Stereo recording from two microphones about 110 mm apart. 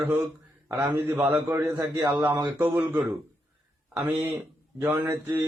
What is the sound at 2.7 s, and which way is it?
Speech, 15° right (ahead or behind).